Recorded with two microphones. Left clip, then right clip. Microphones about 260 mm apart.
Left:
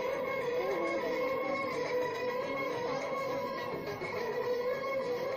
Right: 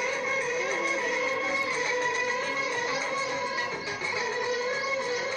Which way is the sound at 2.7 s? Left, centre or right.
Centre.